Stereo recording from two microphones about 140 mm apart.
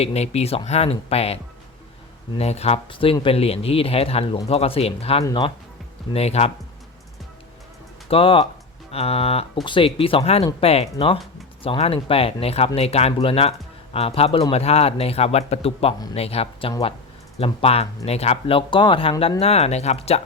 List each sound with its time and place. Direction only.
0.0 s speech: 50° left (ahead or behind)
2.4 s speech: 50° left (ahead or behind)
5.2 s speech: 30° left (ahead or behind)
6.1 s speech: 45° left (ahead or behind)
8.0 s speech: 40° left (ahead or behind)